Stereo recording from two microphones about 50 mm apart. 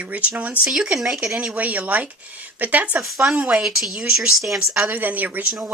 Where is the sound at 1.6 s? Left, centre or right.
Right.